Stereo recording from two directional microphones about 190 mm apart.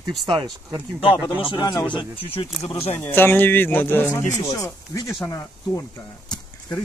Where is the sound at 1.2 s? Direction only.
25° left (ahead or behind).